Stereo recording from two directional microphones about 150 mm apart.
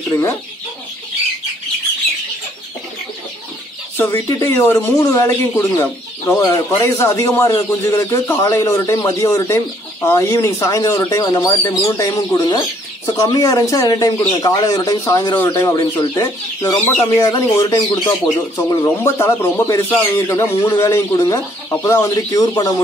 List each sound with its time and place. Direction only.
0.1 s speech: 15° left (ahead or behind)
3.9 s speech: 15° left (ahead or behind)